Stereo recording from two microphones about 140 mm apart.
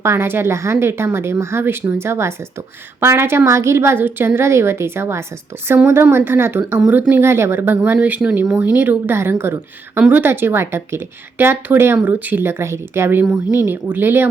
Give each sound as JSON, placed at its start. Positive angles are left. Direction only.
{"t": 0.0, "sound": "speech", "side_deg": -20}